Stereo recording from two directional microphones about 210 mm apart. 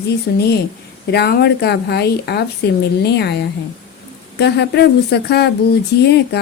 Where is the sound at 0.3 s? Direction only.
50° left (ahead or behind).